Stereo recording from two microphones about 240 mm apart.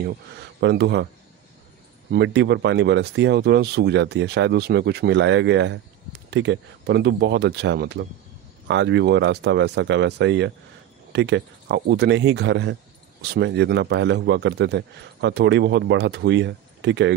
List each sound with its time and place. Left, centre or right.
0.0 s a man's voice: right
2.0 s a man's voice: right